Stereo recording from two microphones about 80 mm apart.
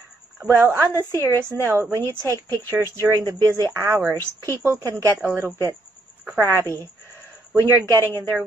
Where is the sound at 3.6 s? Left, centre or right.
Right.